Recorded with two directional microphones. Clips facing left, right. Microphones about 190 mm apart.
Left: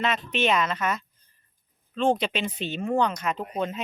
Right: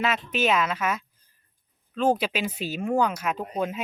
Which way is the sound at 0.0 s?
5° right (ahead or behind).